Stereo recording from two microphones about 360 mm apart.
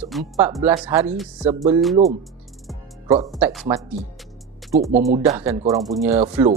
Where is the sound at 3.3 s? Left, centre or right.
Centre.